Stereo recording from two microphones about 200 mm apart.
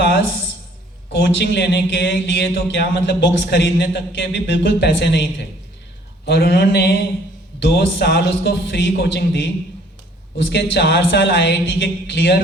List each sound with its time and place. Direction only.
1.1 s speech: 60° left (ahead or behind)